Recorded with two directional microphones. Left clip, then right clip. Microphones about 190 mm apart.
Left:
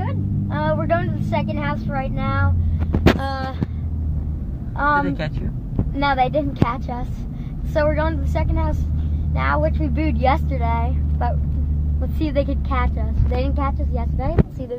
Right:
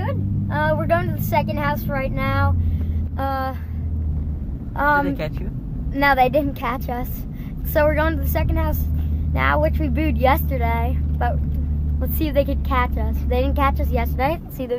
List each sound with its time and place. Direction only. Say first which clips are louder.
0.0 s vehicle: right 1 dB; 10° right (ahead or behind)
4.9 s a woman's voice: even; centre (ahead or behind)
5.9 s speech: right 3 dB; 15° right (ahead or behind)